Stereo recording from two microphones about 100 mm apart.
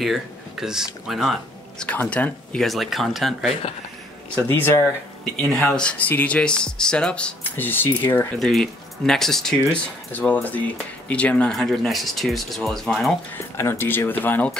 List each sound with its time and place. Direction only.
0.0 s speech: 5° right (ahead or behind)
1.9 s speech: 15° left (ahead or behind)
2.6 s speech: centre (ahead or behind)
4.5 s speech: 20° left (ahead or behind)
5.5 s speech: 10° left (ahead or behind)
8.4 s speech: centre (ahead or behind)
10.1 s speech: 15° left (ahead or behind)
13.3 s speech: 25° left (ahead or behind)